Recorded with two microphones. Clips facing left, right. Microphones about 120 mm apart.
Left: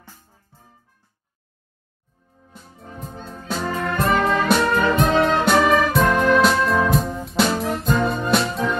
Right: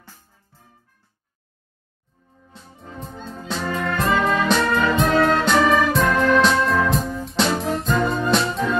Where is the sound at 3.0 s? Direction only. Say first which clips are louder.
Right 1 dB; 5° left (ahead or behind).